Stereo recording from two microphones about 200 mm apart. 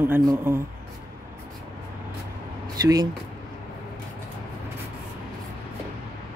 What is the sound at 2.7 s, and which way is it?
Speech, 20° right (ahead or behind).